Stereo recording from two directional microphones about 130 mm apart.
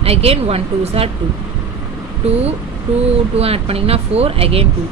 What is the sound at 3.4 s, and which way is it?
Speech, 50° right (ahead or behind).